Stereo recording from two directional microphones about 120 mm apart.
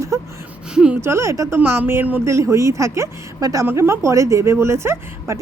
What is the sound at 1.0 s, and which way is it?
A woman's voice, 20° right (ahead or behind).